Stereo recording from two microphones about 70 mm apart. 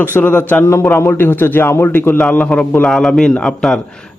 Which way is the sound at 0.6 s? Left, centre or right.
Left.